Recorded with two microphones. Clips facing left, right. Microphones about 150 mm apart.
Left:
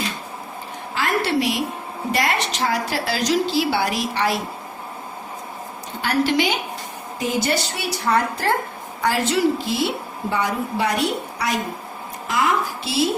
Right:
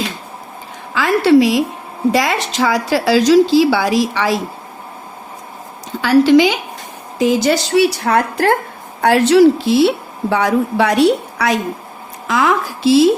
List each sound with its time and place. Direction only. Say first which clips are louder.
0.9 s a woman's voice: right 10 dB; 90° right
6.0 s a woman's voice: right 10 dB; 90° right
12.3 s a sound: right 5 dB; 90° right